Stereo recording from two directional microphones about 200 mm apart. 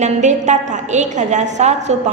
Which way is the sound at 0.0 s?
35° right (ahead or behind).